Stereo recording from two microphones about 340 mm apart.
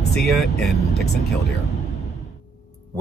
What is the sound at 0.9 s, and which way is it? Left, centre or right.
Speech, left.